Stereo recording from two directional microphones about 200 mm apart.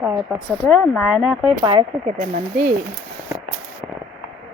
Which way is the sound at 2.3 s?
40° right (ahead or behind).